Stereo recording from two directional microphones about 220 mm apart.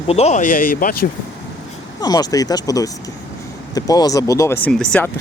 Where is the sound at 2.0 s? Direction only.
15° left (ahead or behind).